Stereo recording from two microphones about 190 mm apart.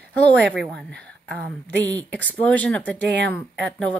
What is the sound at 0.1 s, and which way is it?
A woman's voice, 5° left (ahead or behind).